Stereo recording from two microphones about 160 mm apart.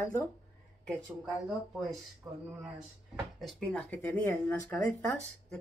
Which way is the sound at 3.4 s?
5° left (ahead or behind).